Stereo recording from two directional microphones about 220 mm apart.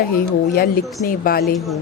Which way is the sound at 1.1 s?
40° left (ahead or behind).